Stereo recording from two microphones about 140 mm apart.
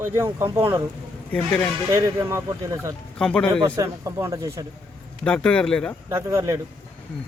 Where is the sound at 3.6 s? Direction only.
25° right (ahead or behind).